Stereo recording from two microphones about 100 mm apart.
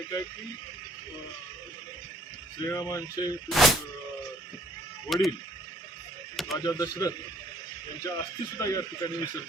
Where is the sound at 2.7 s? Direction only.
30° left (ahead or behind).